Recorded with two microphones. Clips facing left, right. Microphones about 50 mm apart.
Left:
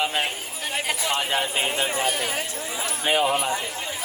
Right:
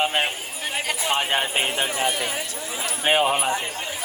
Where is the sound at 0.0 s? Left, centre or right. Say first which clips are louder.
Right 2 dB; right.